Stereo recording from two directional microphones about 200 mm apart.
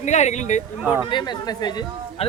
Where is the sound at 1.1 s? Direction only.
20° left (ahead or behind).